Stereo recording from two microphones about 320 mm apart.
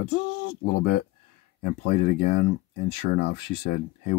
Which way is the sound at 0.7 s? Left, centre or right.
Left.